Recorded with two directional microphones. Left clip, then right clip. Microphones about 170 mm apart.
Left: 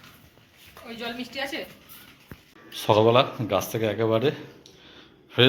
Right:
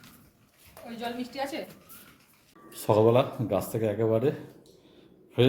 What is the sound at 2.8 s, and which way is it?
A man's voice, 15° right (ahead or behind).